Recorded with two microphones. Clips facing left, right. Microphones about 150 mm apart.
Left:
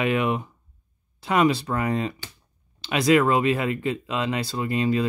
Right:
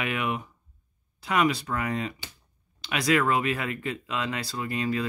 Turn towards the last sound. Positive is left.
turn(degrees=25)  # may be behind; listen again after turning